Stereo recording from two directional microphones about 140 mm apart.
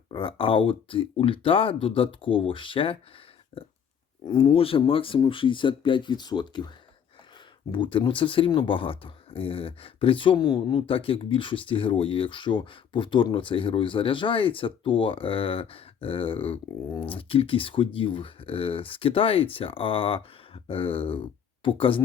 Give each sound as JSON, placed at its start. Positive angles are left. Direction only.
{"t": 0.1, "sound": "speech", "side_deg": 40}
{"t": 3.5, "sound": "a sound", "side_deg": 40}
{"t": 4.3, "sound": "speech", "side_deg": 40}
{"t": 7.7, "sound": "speech", "side_deg": 35}